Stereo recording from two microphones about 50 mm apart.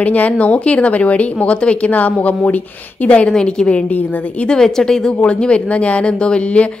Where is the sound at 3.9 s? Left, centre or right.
Left.